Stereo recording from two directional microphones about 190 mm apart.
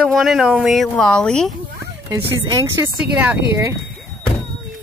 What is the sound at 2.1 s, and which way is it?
Speech, 20° right (ahead or behind).